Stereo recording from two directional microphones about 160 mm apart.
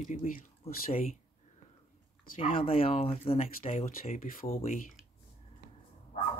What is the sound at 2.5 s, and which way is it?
Speech, 35° left (ahead or behind).